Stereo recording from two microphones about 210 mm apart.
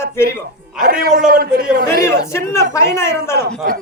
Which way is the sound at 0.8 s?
45° right (ahead or behind).